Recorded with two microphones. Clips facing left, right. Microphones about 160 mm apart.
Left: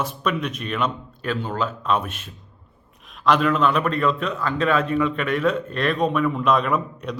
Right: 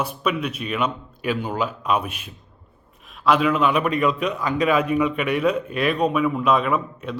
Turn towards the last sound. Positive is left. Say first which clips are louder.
# even
turn(degrees=-5)  # may be behind; listen again after turning